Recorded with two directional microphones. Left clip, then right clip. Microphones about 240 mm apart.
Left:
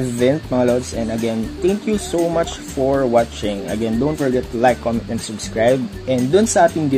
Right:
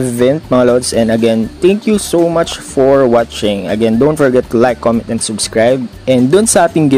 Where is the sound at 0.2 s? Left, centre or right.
Right.